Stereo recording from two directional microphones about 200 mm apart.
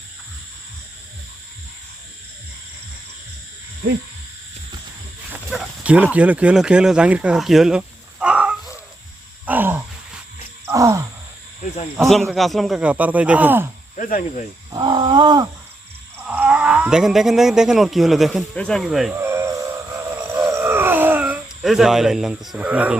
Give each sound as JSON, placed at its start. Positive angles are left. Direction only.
{"t": 5.3, "sound": "dog", "side_deg": -5}
{"t": 9.5, "sound": "a sound", "side_deg": -10}
{"t": 10.7, "sound": "groan", "side_deg": -15}
{"t": 12.2, "sound": "speech", "side_deg": 0}
{"t": 13.9, "sound": "speech", "side_deg": 40}
{"t": 14.7, "sound": "wild animals", "side_deg": -20}
{"t": 16.2, "sound": "speech", "side_deg": -10}
{"t": 19.2, "sound": "wail", "side_deg": -15}